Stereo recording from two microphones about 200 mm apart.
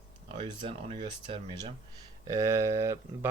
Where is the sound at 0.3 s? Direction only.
25° right (ahead or behind).